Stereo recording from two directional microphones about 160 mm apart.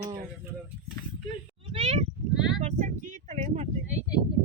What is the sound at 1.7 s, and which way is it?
Speech, 45° right (ahead or behind).